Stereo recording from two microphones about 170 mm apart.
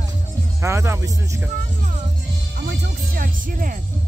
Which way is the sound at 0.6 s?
15° right (ahead or behind).